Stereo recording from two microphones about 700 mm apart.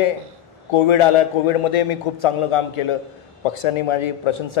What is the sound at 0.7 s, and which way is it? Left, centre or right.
Mantra, left.